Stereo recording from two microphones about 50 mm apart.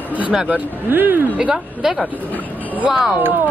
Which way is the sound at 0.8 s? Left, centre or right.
Right.